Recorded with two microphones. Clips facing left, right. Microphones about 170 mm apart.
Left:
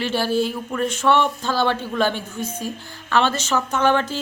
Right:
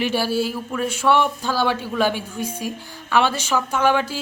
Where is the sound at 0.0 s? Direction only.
10° right (ahead or behind).